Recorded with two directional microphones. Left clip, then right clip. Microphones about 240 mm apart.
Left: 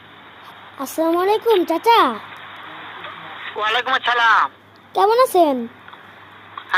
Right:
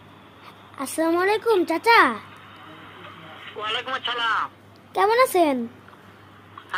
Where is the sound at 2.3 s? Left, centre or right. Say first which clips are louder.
Left 8 dB; left.